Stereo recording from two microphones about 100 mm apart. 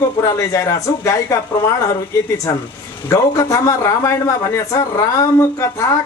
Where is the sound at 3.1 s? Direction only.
30° left (ahead or behind).